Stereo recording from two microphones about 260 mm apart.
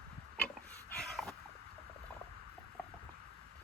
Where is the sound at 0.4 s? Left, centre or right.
Centre.